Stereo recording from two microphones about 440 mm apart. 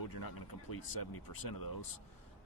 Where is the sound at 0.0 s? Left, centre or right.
Left.